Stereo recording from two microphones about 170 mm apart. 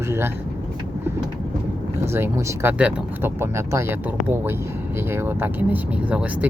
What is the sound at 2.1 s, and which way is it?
Speech, 15° right (ahead or behind).